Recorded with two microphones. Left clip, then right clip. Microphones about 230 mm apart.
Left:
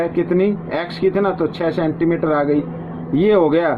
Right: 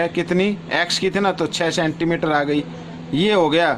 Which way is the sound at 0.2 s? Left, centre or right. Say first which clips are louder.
Left 3 dB; right.